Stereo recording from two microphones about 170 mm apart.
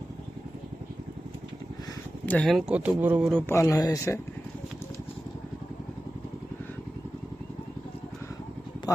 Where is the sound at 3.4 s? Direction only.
20° left (ahead or behind).